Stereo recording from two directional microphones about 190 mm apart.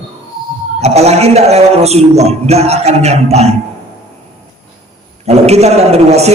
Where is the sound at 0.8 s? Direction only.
35° right (ahead or behind).